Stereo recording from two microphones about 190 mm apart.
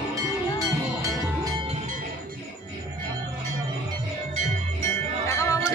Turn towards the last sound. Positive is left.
turn(degrees=15)  # may be behind; listen again after turning